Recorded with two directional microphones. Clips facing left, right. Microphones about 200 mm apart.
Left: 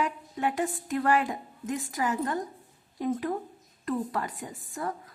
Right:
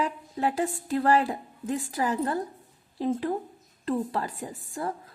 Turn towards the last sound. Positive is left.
turn(degrees=-30)  # may be behind; listen again after turning